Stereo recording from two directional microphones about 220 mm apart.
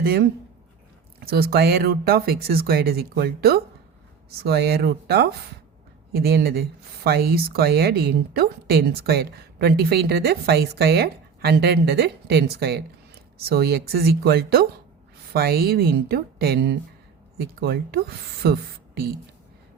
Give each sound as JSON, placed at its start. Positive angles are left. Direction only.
{"t": 0.0, "sound": "a woman's voice", "side_deg": -45}